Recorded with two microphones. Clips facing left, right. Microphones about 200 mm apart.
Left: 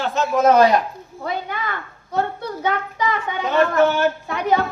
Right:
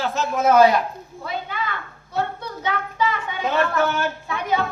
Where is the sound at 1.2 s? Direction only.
45° left (ahead or behind).